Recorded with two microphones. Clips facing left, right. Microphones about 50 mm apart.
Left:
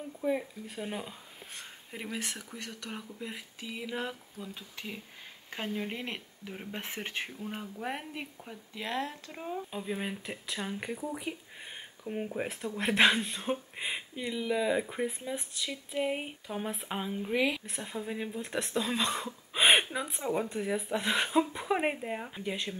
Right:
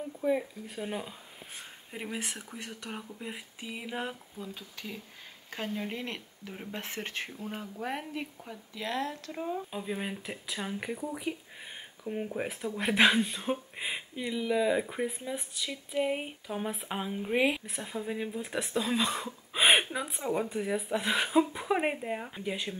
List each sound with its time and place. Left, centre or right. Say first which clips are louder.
0.2 s speech: right 2 dB; centre
4.7 s speech: left 1 dB; centre
5.5 s speech: even; centre
17.3 s a woman's voice: right 2 dB; right
17.6 s speech: right 1 dB; centre